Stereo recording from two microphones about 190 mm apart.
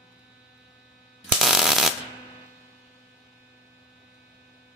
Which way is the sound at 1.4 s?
Centre (ahead or behind).